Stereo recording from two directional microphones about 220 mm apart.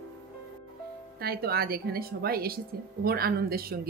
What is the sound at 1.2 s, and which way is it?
Speech, 45° right (ahead or behind).